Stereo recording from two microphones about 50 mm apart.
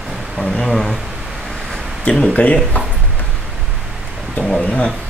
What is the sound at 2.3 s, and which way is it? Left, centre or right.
Speech, left.